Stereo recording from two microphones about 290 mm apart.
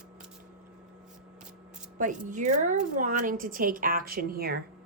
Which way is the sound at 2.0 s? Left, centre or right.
Right.